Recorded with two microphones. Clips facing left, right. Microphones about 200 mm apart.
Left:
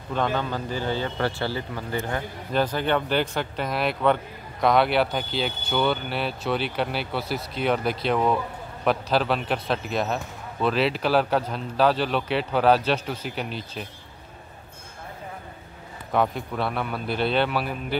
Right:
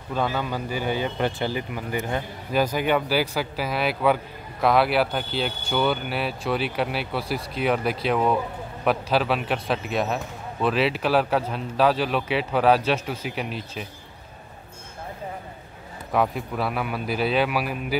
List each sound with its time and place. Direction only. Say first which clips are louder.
0.1 s speech: even; 10° right (ahead or behind)
16.1 s speech: even; 5° right (ahead or behind)